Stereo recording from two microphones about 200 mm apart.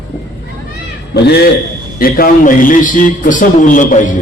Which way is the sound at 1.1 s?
55° left (ahead or behind).